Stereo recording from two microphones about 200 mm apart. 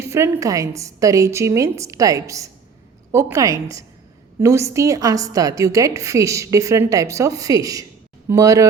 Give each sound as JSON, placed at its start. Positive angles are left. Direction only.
{"t": 0.1, "sound": "a woman's voice", "side_deg": -15}